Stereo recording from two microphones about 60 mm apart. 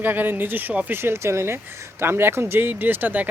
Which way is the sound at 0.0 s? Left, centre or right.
Right.